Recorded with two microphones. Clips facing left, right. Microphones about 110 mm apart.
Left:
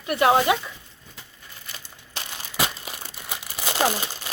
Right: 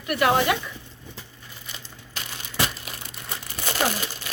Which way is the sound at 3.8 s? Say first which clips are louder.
Left 2 dB; 30° left (ahead or behind).